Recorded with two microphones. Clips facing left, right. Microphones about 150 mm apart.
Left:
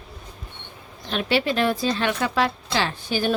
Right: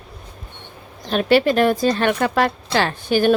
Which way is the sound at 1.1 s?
50° right (ahead or behind).